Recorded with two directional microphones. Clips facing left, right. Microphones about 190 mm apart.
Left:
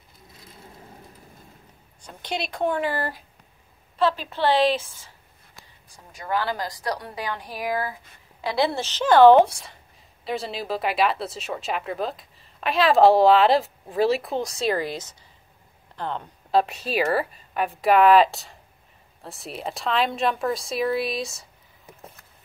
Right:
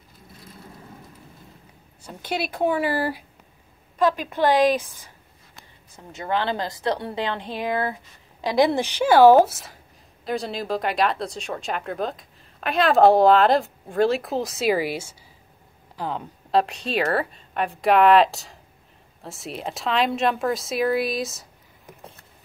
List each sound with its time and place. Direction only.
2.0 s a woman's voice: 5° right (ahead or behind)